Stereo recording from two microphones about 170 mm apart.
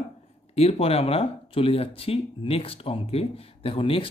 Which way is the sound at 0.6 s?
35° left (ahead or behind).